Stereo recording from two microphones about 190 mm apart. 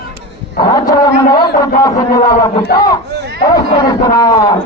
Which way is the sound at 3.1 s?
60° right (ahead or behind).